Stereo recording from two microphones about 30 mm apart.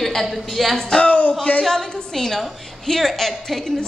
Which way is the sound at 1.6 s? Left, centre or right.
Centre.